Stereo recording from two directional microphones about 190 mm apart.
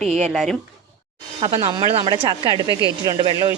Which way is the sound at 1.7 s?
25° right (ahead or behind).